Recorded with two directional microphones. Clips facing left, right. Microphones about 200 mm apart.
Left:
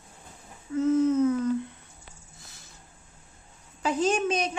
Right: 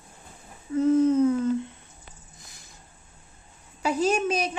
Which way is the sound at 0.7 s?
35° right (ahead or behind).